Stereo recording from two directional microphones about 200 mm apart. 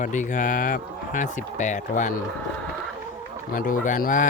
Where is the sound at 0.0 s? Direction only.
40° left (ahead or behind).